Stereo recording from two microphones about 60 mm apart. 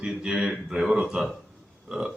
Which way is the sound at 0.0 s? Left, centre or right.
Centre.